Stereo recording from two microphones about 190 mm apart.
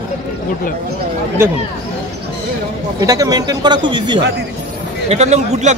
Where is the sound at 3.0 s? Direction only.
20° right (ahead or behind).